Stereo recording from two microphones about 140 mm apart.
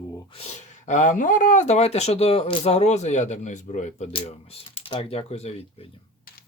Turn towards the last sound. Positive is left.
turn(degrees=50)  # may be behind; listen again after turning